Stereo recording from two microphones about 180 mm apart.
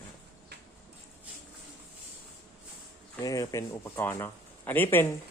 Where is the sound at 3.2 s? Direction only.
20° left (ahead or behind).